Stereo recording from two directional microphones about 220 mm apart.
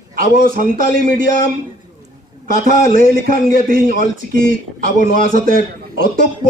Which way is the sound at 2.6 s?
40° right (ahead or behind).